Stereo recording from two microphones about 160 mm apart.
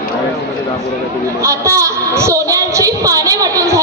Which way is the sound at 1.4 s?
20° right (ahead or behind).